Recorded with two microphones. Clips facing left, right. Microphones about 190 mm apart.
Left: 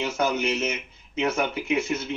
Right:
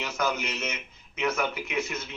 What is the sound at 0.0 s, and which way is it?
Speech, 30° left (ahead or behind).